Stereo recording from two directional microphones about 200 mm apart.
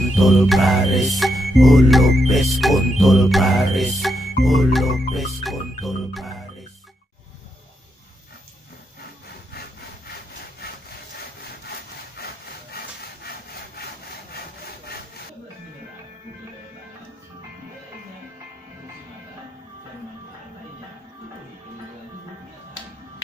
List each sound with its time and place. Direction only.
0.2 s music: centre (ahead or behind)
12.2 s sawing: 50° left (ahead or behind)